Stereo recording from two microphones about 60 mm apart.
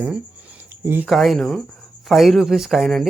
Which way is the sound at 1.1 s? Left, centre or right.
Centre.